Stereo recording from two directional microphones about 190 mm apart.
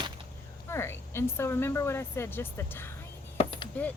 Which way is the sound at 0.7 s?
15° left (ahead or behind).